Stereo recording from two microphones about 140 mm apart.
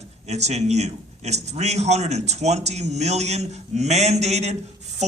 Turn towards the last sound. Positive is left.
turn(degrees=-50)  # may be behind; listen again after turning